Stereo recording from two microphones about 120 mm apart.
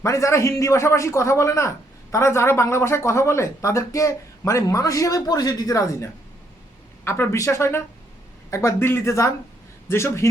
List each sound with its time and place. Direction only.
0.0 s speech: 25° left (ahead or behind)